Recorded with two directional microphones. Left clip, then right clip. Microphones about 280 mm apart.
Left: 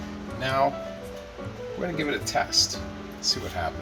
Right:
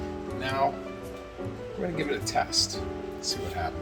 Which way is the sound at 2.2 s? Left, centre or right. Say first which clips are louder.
Even; left.